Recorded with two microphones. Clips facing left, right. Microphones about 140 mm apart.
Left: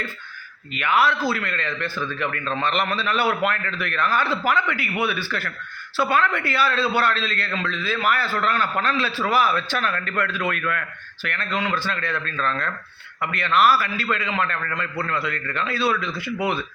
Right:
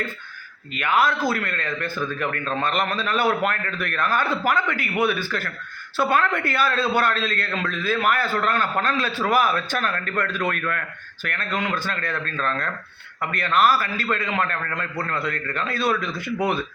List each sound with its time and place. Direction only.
0.8 s a man's voice: 45° right (ahead or behind)